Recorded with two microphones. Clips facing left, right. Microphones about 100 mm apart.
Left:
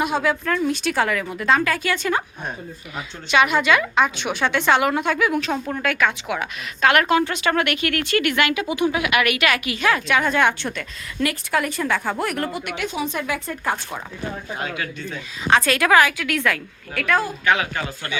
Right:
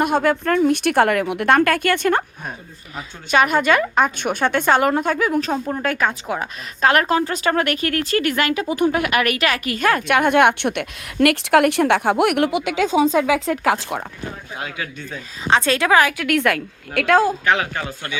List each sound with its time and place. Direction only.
0.0 s a woman's voice: 55° right (ahead or behind)
3.3 s a woman's voice: 45° right (ahead or behind)
8.7 s a woman's voice: 45° right (ahead or behind); by 14.0 s 90° right
14.6 s speech: 10° right (ahead or behind)
15.4 s a woman's voice: 25° right (ahead or behind)
16.0 s a woman's voice: 45° right (ahead or behind); by 17.3 s 85° right